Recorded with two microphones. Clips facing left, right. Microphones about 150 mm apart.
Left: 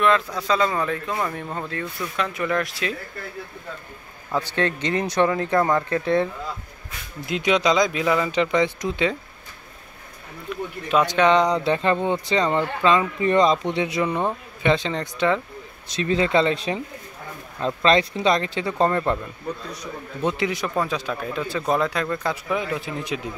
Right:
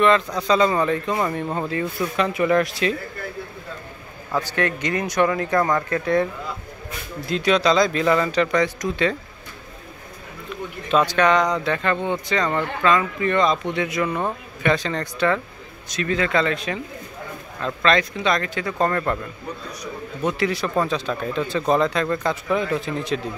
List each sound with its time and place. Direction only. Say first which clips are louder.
0.0 s speech: right 2 dB; 5° left (ahead or behind)
4.4 s speech: even; 25° left (ahead or behind)
7.2 s speech: right 1 dB; 20° left (ahead or behind)
8.3 s speech: right 1 dB; 20° left (ahead or behind)
10.9 s speech: even; 15° left (ahead or behind)
15.9 s speech: left 1 dB; 30° left (ahead or behind)
18.9 s speech: left 1 dB; 15° left (ahead or behind)
20.2 s speech: right 1 dB; 20° left (ahead or behind)